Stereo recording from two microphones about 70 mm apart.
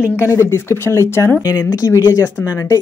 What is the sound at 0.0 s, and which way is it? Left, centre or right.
Speech, left.